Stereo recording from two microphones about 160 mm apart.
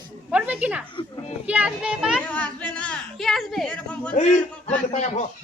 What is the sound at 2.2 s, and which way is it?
Speech, 10° left (ahead or behind).